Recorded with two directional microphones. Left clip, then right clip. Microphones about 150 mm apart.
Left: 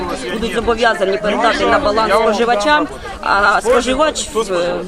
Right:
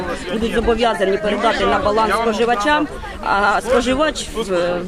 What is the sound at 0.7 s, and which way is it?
Speech, centre (ahead or behind).